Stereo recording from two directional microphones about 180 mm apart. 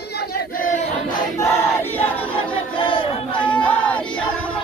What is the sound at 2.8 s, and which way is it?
Crowd, 30° left (ahead or behind).